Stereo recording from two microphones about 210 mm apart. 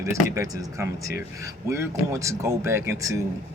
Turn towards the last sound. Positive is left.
turn(degrees=-15)  # may be behind; listen again after turning